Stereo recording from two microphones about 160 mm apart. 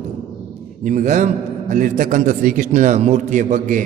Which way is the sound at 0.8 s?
50° right (ahead or behind).